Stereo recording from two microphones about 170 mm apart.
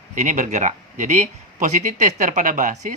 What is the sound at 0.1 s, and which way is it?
A man's voice, 45° right (ahead or behind).